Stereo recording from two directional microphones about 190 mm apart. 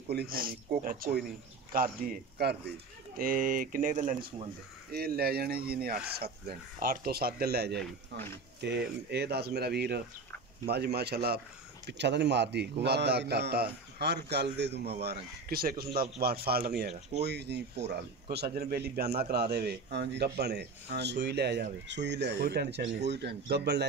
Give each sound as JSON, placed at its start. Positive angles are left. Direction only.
{"t": 0.1, "sound": "a man's voice", "side_deg": -55}
{"t": 4.9, "sound": "a man's voice", "side_deg": -55}